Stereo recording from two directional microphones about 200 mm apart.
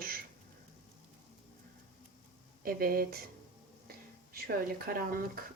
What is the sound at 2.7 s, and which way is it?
Speech, 45° right (ahead or behind).